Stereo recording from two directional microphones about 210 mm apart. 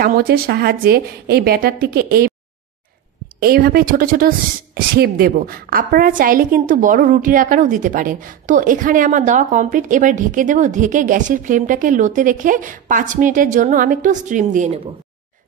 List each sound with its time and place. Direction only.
0.0 s a woman's voice: 45° right (ahead or behind)
3.3 s a woman's voice: 45° right (ahead or behind)